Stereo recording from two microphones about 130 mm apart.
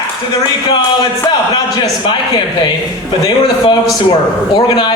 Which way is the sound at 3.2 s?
30° left (ahead or behind).